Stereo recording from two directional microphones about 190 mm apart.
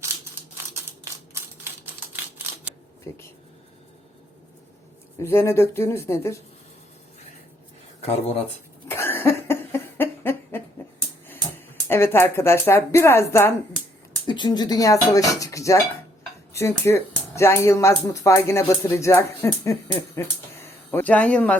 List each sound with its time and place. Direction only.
0.5 s a sound: 15° right (ahead or behind)
3.1 s speech: 15° left (ahead or behind)
5.2 s speech: 15° left (ahead or behind)
8.9 s cough: 10° left (ahead or behind)
11.9 s speech: 10° left (ahead or behind)
14.3 s speech: 25° left (ahead or behind); by 21.5 s 5° left (ahead or behind)